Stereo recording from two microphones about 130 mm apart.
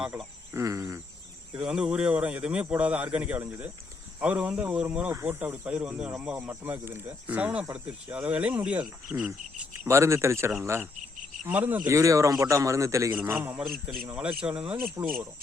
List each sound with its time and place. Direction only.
0.5 s a man's voice: 25° right (ahead or behind)
1.5 s speech: 5° right (ahead or behind)
9.8 s a man's voice: 20° right (ahead or behind)
13.6 s a man's voice: 5° right (ahead or behind)